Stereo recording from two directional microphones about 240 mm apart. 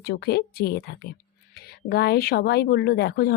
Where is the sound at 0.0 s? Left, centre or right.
Left.